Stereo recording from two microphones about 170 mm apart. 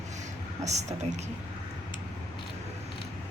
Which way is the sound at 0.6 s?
40° right (ahead or behind).